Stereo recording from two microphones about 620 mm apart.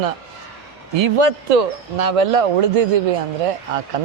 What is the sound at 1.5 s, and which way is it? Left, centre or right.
Speech, right.